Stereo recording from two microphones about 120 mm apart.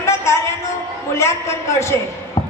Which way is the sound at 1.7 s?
25° left (ahead or behind).